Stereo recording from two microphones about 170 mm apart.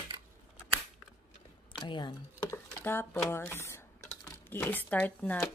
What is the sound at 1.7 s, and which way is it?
Speech, 25° left (ahead or behind).